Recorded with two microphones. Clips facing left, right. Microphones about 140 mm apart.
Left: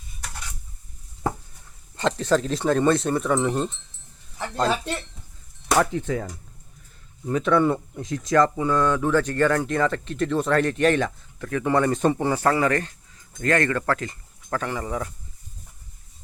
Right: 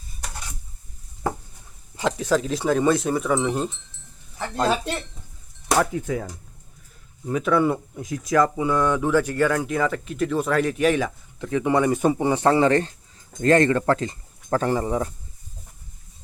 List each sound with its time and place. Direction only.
2.0 s speech: 5° right (ahead or behind)
11.3 s speech: 20° right (ahead or behind)